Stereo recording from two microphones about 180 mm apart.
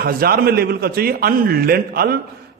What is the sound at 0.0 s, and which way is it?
A man's voice, 55° right (ahead or behind).